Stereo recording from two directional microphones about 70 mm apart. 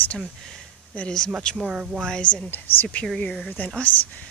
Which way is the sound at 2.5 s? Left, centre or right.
Left.